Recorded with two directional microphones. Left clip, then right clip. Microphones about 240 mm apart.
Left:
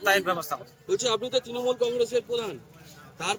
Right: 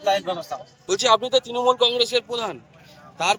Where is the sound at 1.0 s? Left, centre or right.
Centre.